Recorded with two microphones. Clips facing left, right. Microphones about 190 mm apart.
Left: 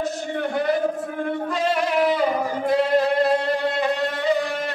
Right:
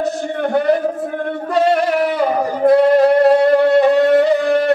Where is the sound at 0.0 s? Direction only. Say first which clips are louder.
Right 6 dB; 60° right (ahead or behind).